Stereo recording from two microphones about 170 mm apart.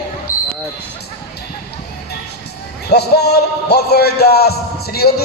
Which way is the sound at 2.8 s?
70° left (ahead or behind).